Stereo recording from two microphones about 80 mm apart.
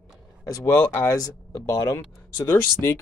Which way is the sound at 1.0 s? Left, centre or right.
Left.